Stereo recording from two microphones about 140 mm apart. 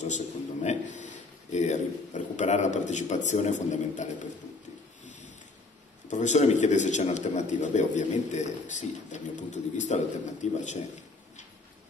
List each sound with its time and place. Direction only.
0.0 s a man's voice: 55° left (ahead or behind)
5.0 s a sound: 60° left (ahead or behind)
6.0 s a man's voice: 60° left (ahead or behind)